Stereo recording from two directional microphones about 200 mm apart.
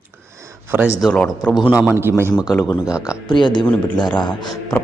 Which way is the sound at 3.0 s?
20° left (ahead or behind).